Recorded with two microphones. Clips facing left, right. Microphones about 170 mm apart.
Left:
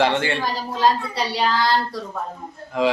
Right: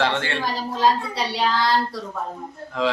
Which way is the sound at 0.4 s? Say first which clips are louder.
Right 2 dB; centre (ahead or behind).